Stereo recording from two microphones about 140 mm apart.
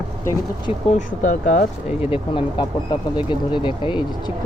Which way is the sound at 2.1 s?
40° left (ahead or behind).